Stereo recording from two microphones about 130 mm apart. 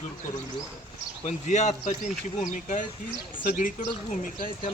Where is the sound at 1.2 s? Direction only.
65° left (ahead or behind).